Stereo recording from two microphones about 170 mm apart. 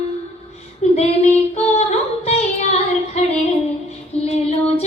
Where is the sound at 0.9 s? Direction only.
40° left (ahead or behind).